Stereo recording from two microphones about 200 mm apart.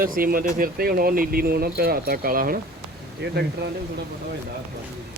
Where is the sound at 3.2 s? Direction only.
55° right (ahead or behind).